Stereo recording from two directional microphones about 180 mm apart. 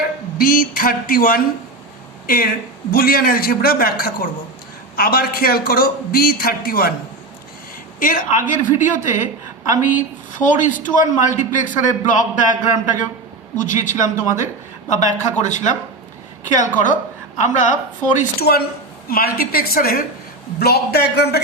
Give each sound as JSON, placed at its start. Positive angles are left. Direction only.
{"t": 0.3, "sound": "a man's voice", "side_deg": 50}
{"t": 7.9, "sound": "a woman's voice", "side_deg": 50}
{"t": 19.0, "sound": "a man's voice", "side_deg": 55}